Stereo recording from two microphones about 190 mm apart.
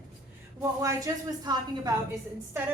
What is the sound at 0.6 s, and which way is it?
Speech, 15° right (ahead or behind).